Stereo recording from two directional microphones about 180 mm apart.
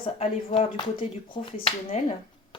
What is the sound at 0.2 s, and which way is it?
Speech, 30° left (ahead or behind).